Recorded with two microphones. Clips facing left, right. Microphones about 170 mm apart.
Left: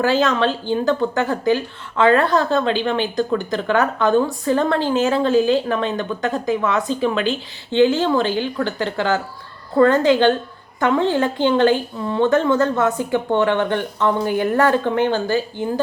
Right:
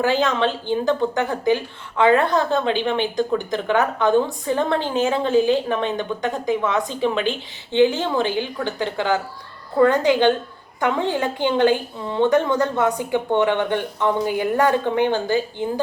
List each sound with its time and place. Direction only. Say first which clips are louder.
0.0 s speech: left 2 dB; 20° right (ahead or behind)